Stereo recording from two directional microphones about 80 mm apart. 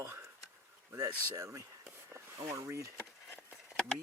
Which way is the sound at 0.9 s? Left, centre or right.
Right.